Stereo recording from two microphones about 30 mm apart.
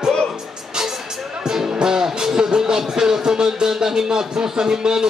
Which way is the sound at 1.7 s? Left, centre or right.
Right.